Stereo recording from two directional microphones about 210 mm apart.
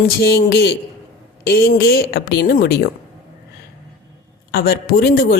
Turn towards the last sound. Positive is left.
turn(degrees=45)  # may be behind; listen again after turning